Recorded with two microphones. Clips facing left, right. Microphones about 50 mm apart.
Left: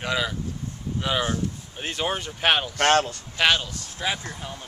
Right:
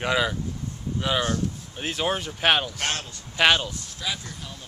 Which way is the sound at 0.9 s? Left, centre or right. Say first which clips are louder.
Even; centre.